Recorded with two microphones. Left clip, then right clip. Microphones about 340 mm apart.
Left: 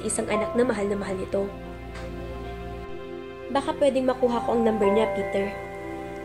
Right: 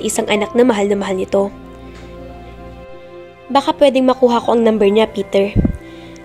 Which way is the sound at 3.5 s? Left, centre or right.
Right.